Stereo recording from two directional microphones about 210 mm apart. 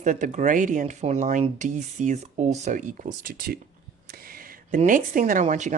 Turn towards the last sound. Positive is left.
turn(degrees=-35)  # may be behind; listen again after turning